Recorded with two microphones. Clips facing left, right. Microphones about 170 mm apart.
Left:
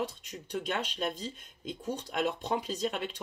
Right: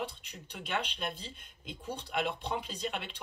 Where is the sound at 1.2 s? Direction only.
45° left (ahead or behind).